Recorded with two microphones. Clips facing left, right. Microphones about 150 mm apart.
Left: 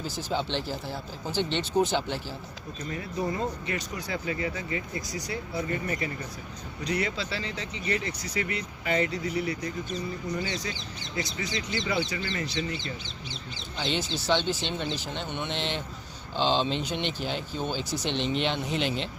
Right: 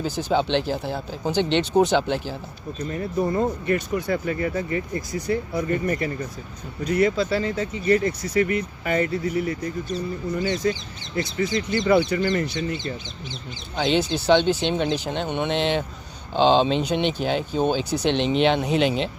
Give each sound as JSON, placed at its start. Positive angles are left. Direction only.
{"t": 0.3, "sound": "speech", "side_deg": -75}
{"t": 2.9, "sound": "speech", "side_deg": -45}
{"t": 14.3, "sound": "speech", "side_deg": -60}